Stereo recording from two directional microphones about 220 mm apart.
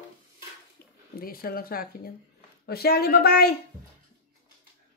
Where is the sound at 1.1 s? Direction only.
40° left (ahead or behind).